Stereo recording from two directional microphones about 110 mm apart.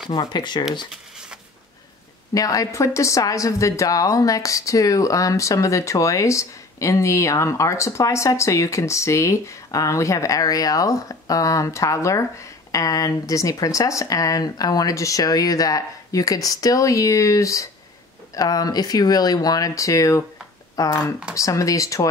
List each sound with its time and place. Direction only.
0.1 s speech: 40° left (ahead or behind)
2.3 s a woman's voice: 30° left (ahead or behind)